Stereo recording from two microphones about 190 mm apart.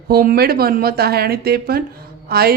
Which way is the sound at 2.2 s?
55° right (ahead or behind).